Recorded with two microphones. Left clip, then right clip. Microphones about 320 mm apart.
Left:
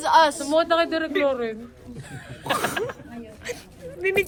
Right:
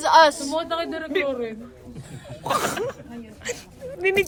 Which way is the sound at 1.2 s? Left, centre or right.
Centre.